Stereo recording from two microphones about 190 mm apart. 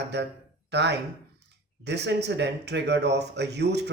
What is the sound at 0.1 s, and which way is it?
Speech, 65° right (ahead or behind).